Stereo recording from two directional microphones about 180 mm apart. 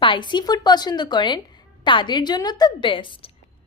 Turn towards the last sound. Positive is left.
turn(degrees=30)  # may be behind; listen again after turning